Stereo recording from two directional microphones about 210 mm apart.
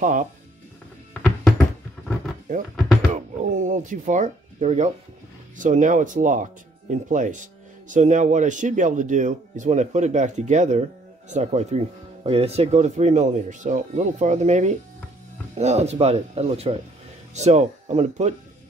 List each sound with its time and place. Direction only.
0.0 s speech: 40° right (ahead or behind)
3.1 s speech: 35° right (ahead or behind)